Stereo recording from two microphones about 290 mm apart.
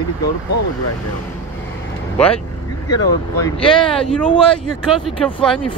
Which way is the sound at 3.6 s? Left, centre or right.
Centre.